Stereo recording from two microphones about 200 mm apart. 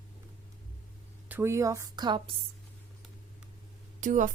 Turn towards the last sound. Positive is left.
turn(degrees=-40)  # may be behind; listen again after turning